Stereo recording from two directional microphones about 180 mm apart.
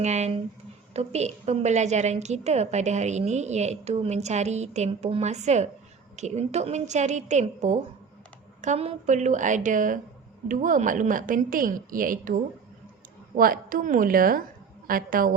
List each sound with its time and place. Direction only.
0.0 s a woman's voice: 40° right (ahead or behind)